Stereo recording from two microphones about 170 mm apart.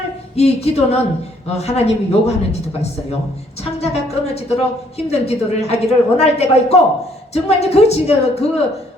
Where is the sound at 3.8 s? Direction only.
35° left (ahead or behind).